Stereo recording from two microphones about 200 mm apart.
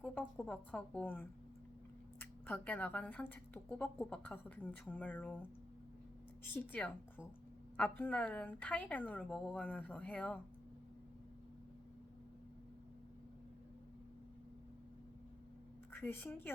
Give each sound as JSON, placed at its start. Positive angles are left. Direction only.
{"t": 0.0, "sound": "speech", "side_deg": 5}
{"t": 15.9, "sound": "a woman's voice", "side_deg": 10}